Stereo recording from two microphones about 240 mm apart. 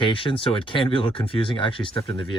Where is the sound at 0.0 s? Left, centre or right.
Centre.